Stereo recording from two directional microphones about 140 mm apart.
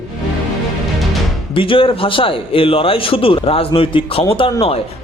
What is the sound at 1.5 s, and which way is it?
Speech, 40° left (ahead or behind).